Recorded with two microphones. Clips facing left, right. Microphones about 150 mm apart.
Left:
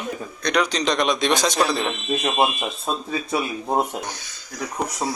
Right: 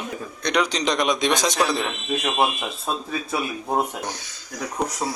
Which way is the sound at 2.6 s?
20° left (ahead or behind).